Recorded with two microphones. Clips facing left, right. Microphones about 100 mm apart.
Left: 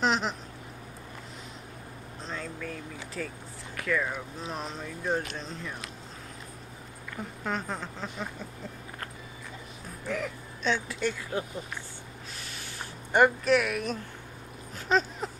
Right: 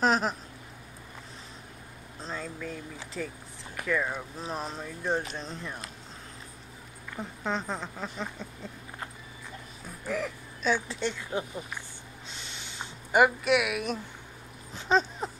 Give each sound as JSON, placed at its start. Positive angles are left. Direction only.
{"t": 0.0, "sound": "speech", "side_deg": -40}
{"t": 2.2, "sound": "a sound", "side_deg": -5}
{"t": 3.2, "sound": "speech", "side_deg": -10}
{"t": 7.2, "sound": "speech", "side_deg": -20}
{"t": 8.0, "sound": "speech", "side_deg": 5}
{"t": 10.0, "sound": "speech", "side_deg": -5}
{"t": 10.9, "sound": "speech", "side_deg": -25}
{"t": 13.1, "sound": "speech", "side_deg": -5}
{"t": 15.0, "sound": "dog", "side_deg": 0}